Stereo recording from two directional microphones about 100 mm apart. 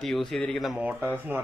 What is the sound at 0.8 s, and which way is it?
Speech, 15° right (ahead or behind).